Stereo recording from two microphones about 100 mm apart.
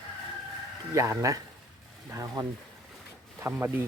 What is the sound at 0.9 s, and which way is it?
Speech, 30° right (ahead or behind).